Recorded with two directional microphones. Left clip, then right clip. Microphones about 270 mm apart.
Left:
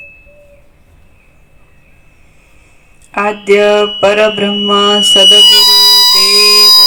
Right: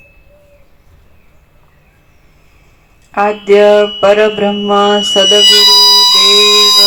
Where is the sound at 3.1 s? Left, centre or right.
Left.